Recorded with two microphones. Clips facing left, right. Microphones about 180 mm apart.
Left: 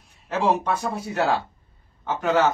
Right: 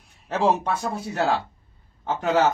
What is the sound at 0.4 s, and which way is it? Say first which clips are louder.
Speech: even; 30° right (ahead or behind).